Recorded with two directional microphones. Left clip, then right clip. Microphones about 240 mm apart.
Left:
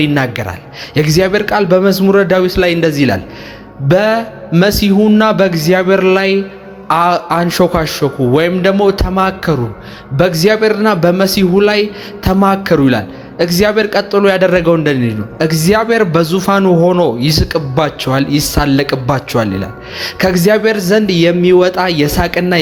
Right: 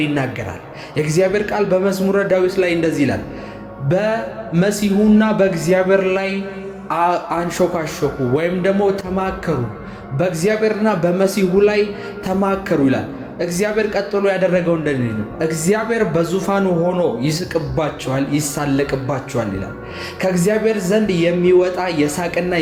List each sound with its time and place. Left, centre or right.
0.0 s a man's voice: left